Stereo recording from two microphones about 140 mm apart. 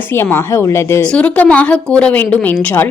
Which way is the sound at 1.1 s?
10° left (ahead or behind).